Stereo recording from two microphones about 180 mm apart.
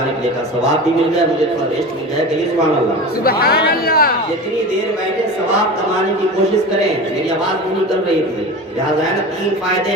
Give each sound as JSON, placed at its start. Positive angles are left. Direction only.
{"t": 3.2, "sound": "speech", "side_deg": 60}